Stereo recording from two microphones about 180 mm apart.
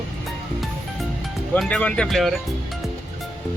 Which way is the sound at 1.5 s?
5° left (ahead or behind).